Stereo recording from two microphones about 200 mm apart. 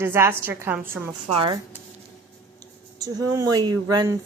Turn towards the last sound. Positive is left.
turn(degrees=-20)  # may be behind; listen again after turning